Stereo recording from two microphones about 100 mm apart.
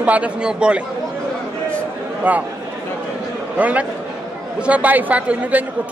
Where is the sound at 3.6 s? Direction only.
15° right (ahead or behind).